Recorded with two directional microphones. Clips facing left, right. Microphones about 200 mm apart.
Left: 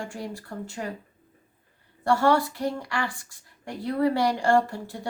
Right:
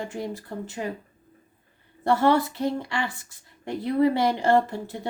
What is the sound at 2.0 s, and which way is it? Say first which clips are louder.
Speech: right 1 dB; 20° right (ahead or behind).